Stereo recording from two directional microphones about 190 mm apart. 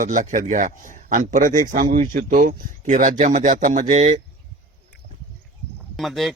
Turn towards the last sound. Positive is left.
turn(degrees=0)  # may be behind; listen again after turning